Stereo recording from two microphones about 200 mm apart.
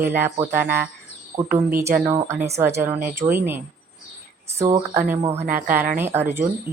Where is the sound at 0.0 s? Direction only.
10° right (ahead or behind).